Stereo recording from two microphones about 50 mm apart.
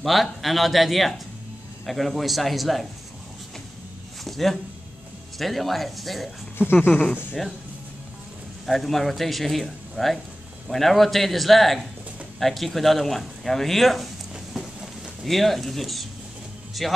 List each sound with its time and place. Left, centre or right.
0.0 s speech: centre
4.2 s speech: centre
6.6 s speech: left
8.6 s speech: centre
15.2 s speech: centre